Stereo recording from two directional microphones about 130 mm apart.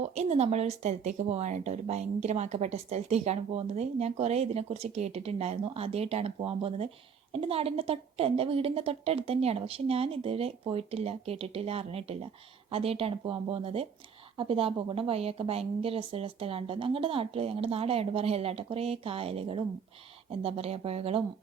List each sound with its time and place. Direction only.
0.0 s a woman's voice: 55° right (ahead or behind)